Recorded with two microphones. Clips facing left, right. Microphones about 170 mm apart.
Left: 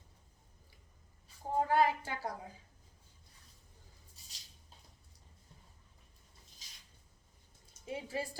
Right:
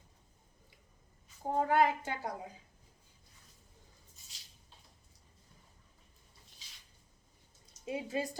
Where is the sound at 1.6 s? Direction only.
20° right (ahead or behind).